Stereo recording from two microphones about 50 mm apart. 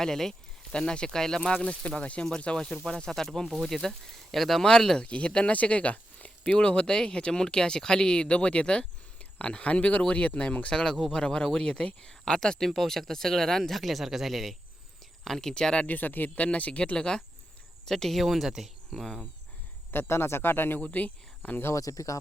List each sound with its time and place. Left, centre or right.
0.0 s speech: centre
0.7 s speech: centre
3.1 s speech: centre
4.9 s speech: left; by 14.5 s centre
15.2 s speech: centre
15.9 s speech: left; by 17.2 s centre
17.8 s speech: centre
18.9 s speech: centre
20.1 s speech: left
20.8 s speech: left
21.7 s speech: left